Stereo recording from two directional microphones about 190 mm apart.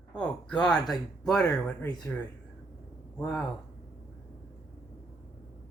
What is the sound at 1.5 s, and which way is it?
Speech, 20° left (ahead or behind).